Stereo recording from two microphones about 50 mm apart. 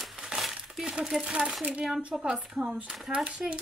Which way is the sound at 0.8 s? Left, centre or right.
Centre.